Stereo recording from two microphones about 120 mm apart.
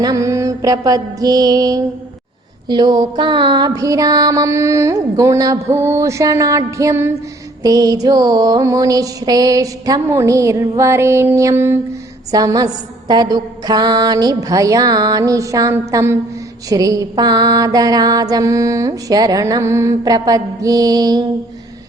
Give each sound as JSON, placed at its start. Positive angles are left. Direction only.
{"t": 0.0, "sound": "mantra", "side_deg": -30}
{"t": 12.3, "sound": "mantra", "side_deg": -30}